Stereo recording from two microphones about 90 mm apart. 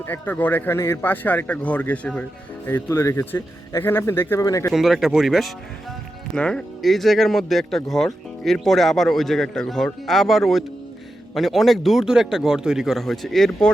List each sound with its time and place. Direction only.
0.0 s a man's voice: 20° left (ahead or behind)
2.6 s a man's voice: 25° left (ahead or behind)
4.4 s speech: 35° left (ahead or behind)
4.7 s speech: 5° right (ahead or behind)
6.3 s speech: 10° left (ahead or behind)